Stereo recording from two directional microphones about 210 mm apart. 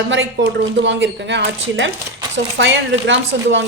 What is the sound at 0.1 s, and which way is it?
Speech, 60° right (ahead or behind).